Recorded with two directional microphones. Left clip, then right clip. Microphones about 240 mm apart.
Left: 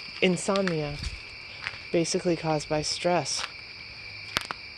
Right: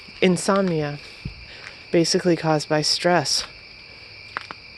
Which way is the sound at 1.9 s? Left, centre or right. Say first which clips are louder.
Right 7 dB; right.